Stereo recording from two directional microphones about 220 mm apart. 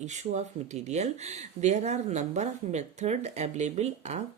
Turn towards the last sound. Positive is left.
turn(degrees=-30)  # may be behind; listen again after turning